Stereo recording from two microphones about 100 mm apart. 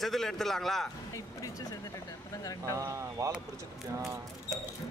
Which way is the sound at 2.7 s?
35° right (ahead or behind).